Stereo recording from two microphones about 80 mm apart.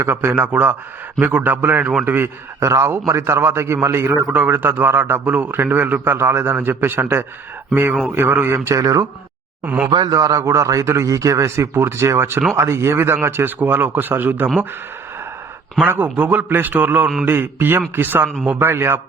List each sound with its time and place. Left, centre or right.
0.0 s a man's voice: right
9.6 s speech: centre
10.1 s a man's voice: right
15.8 s a man's voice: right